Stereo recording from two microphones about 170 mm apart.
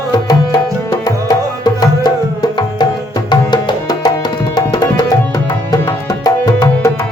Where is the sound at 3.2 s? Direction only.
25° left (ahead or behind).